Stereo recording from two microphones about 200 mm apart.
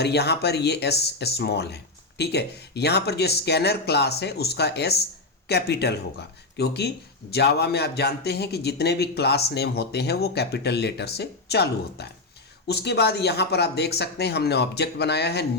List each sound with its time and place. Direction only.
0.0 s speech: 55° left (ahead or behind)